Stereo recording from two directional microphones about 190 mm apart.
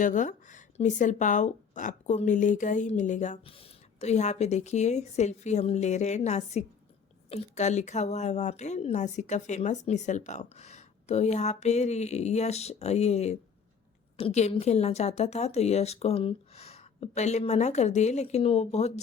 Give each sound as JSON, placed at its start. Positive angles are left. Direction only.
{"t": 0.0, "sound": "speech", "side_deg": 40}